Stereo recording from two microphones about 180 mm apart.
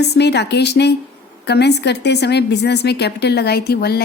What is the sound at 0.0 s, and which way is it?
A woman's voice, 65° left (ahead or behind).